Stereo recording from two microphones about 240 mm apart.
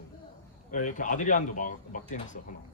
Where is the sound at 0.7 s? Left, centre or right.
Left.